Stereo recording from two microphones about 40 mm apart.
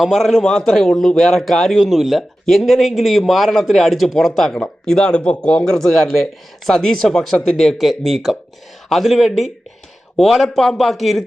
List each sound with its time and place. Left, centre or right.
0.1 s a man's voice: centre
1.7 s speech: centre
4.9 s speech: left
5.7 s a man's voice: centre
10.2 s speech: centre